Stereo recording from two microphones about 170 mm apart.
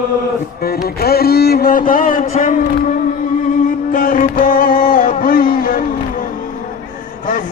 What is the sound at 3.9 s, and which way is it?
Music, 55° left (ahead or behind).